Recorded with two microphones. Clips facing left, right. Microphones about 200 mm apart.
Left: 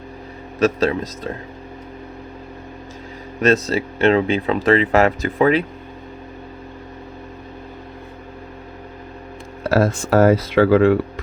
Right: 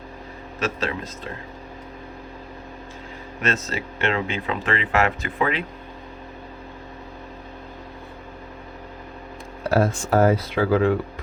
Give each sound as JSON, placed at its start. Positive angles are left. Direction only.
{"t": 0.6, "sound": "speech", "side_deg": 40}
{"t": 3.4, "sound": "speech", "side_deg": 35}
{"t": 9.6, "sound": "speech", "side_deg": 90}